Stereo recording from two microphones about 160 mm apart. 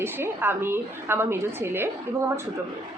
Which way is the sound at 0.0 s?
15° right (ahead or behind).